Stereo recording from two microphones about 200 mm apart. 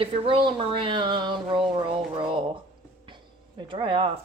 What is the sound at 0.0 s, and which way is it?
Speech, 25° right (ahead or behind).